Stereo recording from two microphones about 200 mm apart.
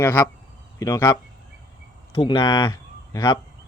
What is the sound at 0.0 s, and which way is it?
Speech, 10° left (ahead or behind).